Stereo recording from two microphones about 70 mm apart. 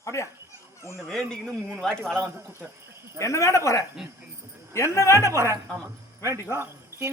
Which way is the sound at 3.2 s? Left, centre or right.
Left.